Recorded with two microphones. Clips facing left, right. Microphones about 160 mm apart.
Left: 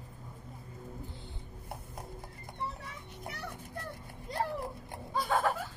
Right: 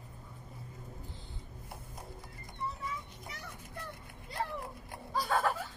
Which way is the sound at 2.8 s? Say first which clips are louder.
Right 2 dB; 65° left (ahead or behind).